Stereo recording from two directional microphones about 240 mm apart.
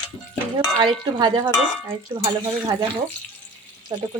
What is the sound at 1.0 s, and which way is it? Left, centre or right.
Speech, centre.